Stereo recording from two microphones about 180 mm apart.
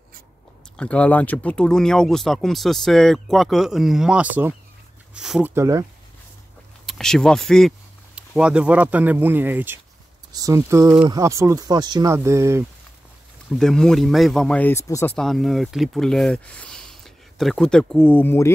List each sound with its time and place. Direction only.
0.7 s speech: 5° left (ahead or behind)
5.5 s speech: 15° right (ahead or behind)
6.9 s speech: centre (ahead or behind); by 12.6 s 15° right (ahead or behind)
13.5 s speech: centre (ahead or behind)
15.1 s speech: centre (ahead or behind)